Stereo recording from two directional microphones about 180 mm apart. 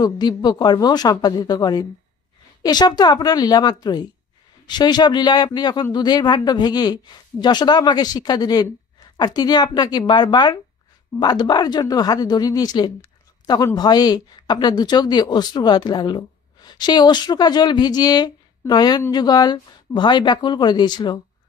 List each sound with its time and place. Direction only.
0.0 s speech: 25° left (ahead or behind)